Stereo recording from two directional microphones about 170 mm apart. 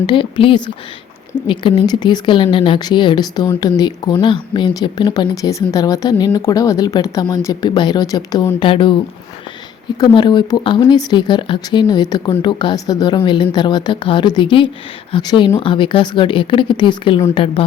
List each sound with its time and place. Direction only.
0.0 s speech: 30° left (ahead or behind)
10.0 s speech: 25° left (ahead or behind)